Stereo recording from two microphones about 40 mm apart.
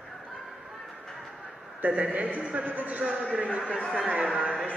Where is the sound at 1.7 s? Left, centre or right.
Right.